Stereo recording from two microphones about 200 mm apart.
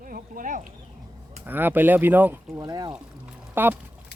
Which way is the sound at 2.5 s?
20° right (ahead or behind).